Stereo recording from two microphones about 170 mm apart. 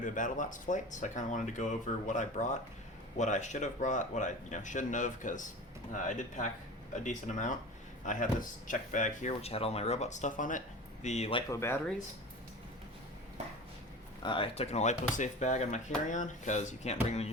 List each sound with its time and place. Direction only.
0.0 s speech: 50° left (ahead or behind)
11.5 s speech: 15° left (ahead or behind)
14.2 s speech: 30° left (ahead or behind)